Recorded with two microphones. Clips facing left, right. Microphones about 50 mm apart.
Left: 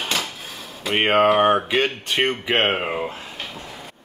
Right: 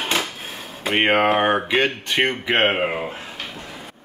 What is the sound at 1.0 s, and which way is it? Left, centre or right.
Speech, right.